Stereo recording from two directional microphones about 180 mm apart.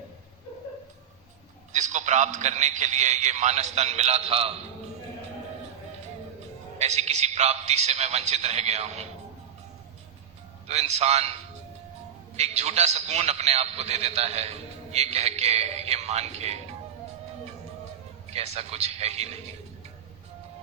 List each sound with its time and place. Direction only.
1.7 s a man's voice: 40° right (ahead or behind)
6.7 s a man's voice: 35° right (ahead or behind)
10.7 s a man's voice: 35° right (ahead or behind)
12.4 s a man's voice: 35° right (ahead or behind)
18.3 s a man's voice: 35° right (ahead or behind)